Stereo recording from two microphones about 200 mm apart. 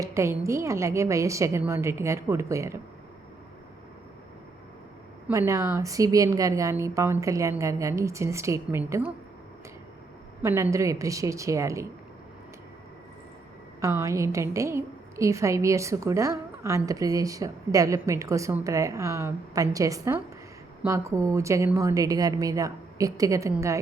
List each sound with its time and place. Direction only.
0.0 s a woman's voice: 15° right (ahead or behind)
5.3 s a woman's voice: 15° right (ahead or behind)
10.4 s a woman's voice: 15° right (ahead or behind)
13.8 s a woman's voice: 15° right (ahead or behind)